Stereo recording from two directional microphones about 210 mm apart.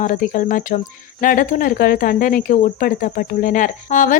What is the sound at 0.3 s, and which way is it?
Speech, 40° left (ahead or behind).